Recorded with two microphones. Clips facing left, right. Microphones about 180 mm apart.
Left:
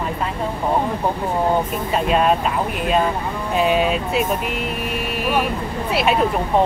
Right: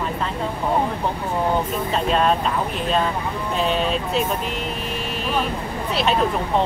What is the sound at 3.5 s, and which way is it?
Speech, 10° left (ahead or behind).